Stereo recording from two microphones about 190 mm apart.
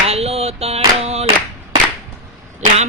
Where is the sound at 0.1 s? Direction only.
30° right (ahead or behind).